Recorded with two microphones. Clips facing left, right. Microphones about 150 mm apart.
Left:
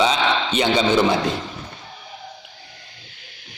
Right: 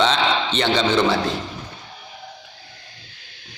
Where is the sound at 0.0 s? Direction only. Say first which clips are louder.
Even; 10° left (ahead or behind).